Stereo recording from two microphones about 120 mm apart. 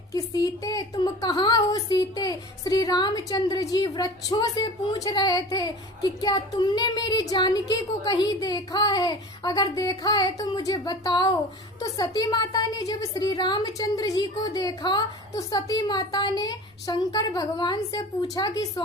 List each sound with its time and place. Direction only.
0.1 s speech: 30° left (ahead or behind)